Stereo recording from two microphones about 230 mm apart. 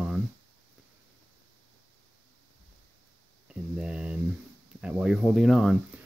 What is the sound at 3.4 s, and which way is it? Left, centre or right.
Speech, centre.